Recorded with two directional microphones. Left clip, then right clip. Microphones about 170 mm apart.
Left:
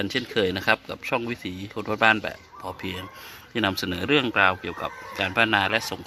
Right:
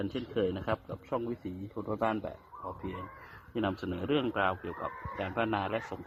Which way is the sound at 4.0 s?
65° left (ahead or behind).